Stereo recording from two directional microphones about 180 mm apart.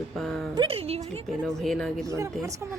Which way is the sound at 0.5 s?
30° right (ahead or behind).